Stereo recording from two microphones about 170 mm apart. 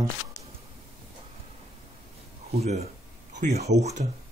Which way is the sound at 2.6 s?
40° right (ahead or behind).